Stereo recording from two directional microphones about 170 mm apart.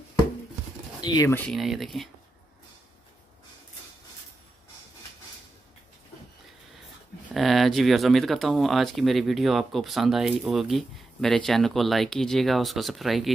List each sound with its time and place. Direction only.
1.0 s speech: 25° left (ahead or behind)
1.3 s speech: 5° left (ahead or behind)
7.2 s speech: centre (ahead or behind)